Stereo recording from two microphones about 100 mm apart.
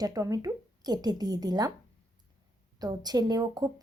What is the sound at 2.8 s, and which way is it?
Speech, 40° right (ahead or behind).